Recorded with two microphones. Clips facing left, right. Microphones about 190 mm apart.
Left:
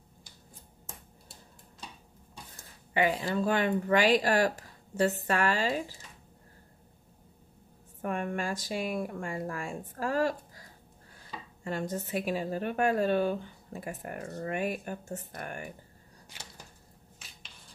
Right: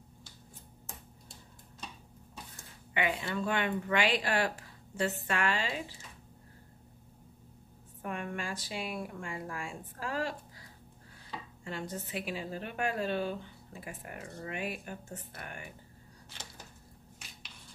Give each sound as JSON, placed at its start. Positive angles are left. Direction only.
{"t": 2.5, "sound": "speech", "side_deg": 35}
{"t": 8.0, "sound": "a woman's voice", "side_deg": 45}
{"t": 11.6, "sound": "a woman's voice", "side_deg": 45}